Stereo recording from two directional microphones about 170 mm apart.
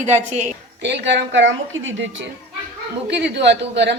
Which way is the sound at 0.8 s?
90° right.